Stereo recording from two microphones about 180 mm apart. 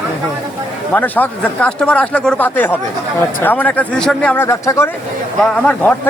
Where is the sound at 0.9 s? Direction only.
10° left (ahead or behind).